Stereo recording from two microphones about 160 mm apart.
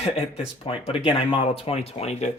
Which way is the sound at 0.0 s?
35° left (ahead or behind).